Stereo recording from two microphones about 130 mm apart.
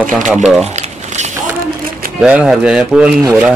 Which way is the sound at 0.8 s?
65° right (ahead or behind).